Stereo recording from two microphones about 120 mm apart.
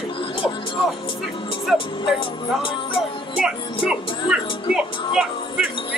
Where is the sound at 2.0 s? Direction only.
45° left (ahead or behind).